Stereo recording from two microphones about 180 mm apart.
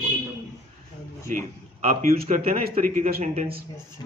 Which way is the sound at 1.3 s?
45° right (ahead or behind).